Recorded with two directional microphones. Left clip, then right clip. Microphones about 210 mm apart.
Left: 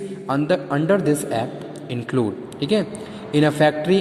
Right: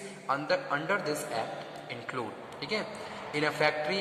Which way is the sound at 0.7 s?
40° left (ahead or behind).